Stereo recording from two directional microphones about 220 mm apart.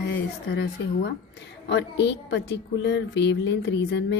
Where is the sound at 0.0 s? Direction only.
50° left (ahead or behind).